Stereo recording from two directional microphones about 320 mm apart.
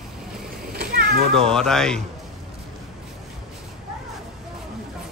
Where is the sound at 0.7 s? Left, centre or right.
Right.